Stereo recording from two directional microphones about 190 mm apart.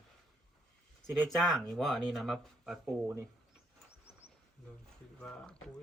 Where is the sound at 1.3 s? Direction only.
5° left (ahead or behind).